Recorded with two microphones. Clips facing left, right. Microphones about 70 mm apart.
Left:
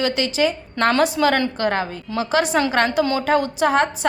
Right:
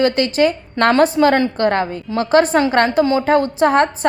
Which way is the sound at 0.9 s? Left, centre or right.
Right.